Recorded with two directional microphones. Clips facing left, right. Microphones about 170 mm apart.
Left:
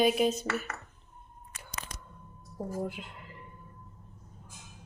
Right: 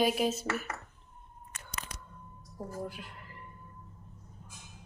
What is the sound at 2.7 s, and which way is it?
Speech, 20° left (ahead or behind).